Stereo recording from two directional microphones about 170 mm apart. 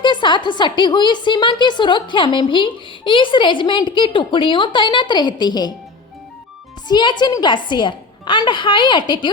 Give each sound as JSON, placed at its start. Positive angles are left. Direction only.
{"t": 0.0, "sound": "a woman's voice", "side_deg": 25}
{"t": 6.8, "sound": "a woman's voice", "side_deg": 25}